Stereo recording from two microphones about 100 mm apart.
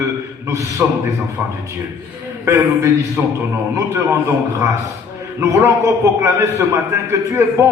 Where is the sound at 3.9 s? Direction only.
30° right (ahead or behind).